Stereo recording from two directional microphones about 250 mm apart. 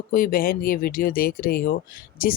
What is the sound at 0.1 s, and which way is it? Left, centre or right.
Speech, left.